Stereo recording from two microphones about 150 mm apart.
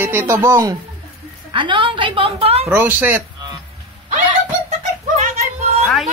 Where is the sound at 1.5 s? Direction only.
35° right (ahead or behind).